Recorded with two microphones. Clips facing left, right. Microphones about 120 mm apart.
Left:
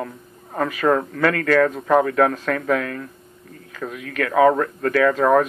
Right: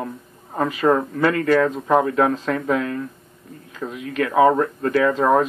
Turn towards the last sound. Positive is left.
turn(degrees=-20)  # may be behind; listen again after turning